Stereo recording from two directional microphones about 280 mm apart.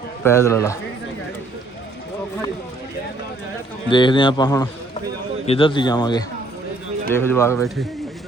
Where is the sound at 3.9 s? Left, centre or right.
Centre.